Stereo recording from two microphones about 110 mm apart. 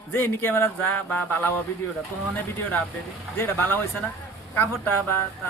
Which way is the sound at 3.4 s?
20° left (ahead or behind).